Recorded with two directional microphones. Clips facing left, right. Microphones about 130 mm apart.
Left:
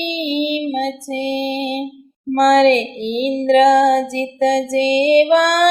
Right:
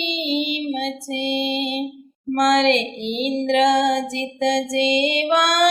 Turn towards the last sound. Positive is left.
turn(degrees=50)  # may be behind; listen again after turning